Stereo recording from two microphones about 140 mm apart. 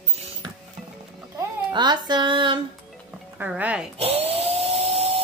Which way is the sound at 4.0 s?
45° right (ahead or behind).